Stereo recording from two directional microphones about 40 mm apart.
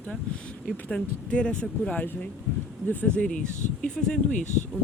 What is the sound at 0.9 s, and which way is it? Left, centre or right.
Speech, left.